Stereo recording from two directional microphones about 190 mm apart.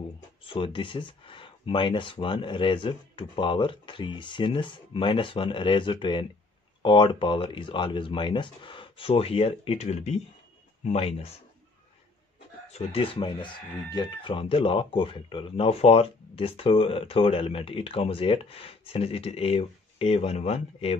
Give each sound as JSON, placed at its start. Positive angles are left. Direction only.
{"t": 0.4, "sound": "speech", "side_deg": 25}
{"t": 12.7, "sound": "speech", "side_deg": 30}